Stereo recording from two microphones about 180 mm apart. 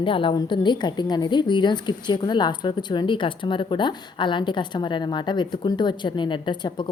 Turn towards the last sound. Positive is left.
turn(degrees=25)  # may be behind; listen again after turning